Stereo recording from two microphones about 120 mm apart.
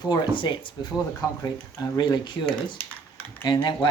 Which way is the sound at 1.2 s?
25° left (ahead or behind).